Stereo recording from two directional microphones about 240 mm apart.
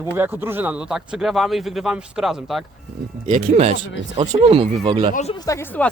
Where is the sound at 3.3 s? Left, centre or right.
Right.